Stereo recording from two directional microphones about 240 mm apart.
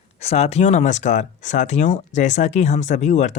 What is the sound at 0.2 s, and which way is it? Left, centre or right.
Speech, left.